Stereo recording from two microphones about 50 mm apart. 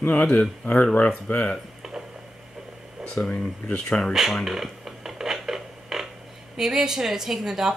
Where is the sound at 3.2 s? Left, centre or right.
Centre.